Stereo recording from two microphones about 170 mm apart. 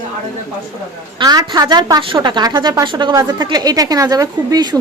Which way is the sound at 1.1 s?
25° right (ahead or behind).